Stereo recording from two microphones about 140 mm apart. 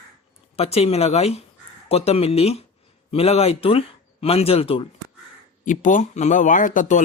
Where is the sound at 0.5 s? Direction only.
50° left (ahead or behind).